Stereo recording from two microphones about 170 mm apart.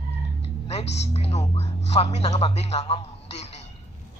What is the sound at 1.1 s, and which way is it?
Speech, 40° left (ahead or behind).